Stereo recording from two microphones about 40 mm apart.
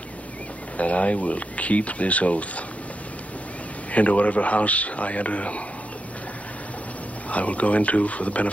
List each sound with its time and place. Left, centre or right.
0.7 s speech: left
3.9 s speech: left
7.2 s speech: left